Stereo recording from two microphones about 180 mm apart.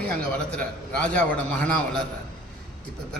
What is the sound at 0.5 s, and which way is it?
Speech, 5° left (ahead or behind).